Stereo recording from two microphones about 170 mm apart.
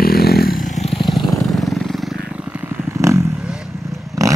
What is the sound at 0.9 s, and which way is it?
Vehicle, centre (ahead or behind).